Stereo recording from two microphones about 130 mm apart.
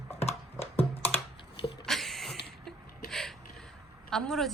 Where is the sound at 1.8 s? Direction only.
Centre (ahead or behind).